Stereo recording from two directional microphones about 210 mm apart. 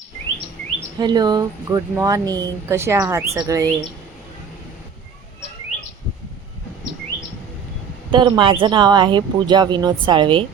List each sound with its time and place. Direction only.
0.9 s speech: 20° right (ahead or behind)
8.1 s speech: 25° right (ahead or behind)